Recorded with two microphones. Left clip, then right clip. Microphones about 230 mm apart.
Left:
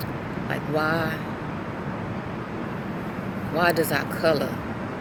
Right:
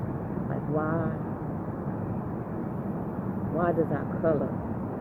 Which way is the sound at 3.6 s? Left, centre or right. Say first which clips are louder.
Left 6 dB; left.